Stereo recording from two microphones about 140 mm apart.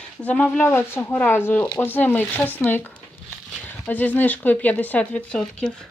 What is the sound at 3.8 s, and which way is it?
Speech, 10° left (ahead or behind).